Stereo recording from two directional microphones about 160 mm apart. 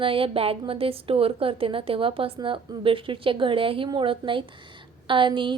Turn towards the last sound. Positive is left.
turn(degrees=-30)  # may be behind; listen again after turning